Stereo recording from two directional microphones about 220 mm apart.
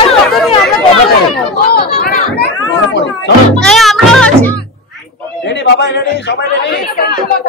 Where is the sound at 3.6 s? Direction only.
Centre (ahead or behind).